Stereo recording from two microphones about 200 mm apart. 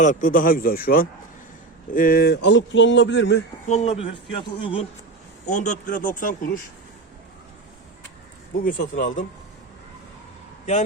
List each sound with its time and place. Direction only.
0.0 s a man's voice: 40° left (ahead or behind); by 3.4 s 60° left (ahead or behind)
3.7 s a man's voice: 30° left (ahead or behind)
5.5 s speech: 40° left (ahead or behind)
8.5 s speech: 45° left (ahead or behind)